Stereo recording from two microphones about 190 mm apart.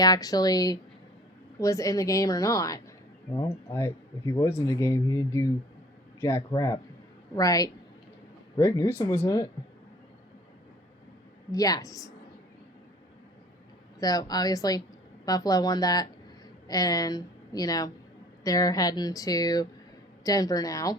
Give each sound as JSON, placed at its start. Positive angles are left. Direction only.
{"t": 0.0, "sound": "speech", "side_deg": 20}
{"t": 11.5, "sound": "speech", "side_deg": 20}
{"t": 14.0, "sound": "a woman's voice", "side_deg": 20}